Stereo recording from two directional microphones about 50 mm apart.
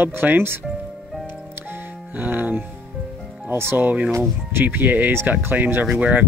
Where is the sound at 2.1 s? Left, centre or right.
Right.